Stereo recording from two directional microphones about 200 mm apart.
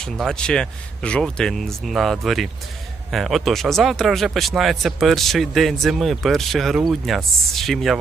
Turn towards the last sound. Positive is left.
turn(degrees=0)  # may be behind; listen again after turning